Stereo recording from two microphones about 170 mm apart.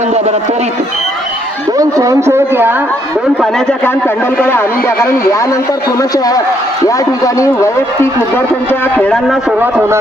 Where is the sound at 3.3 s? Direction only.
Centre (ahead or behind).